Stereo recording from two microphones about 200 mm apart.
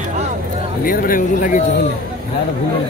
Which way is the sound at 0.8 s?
45° left (ahead or behind).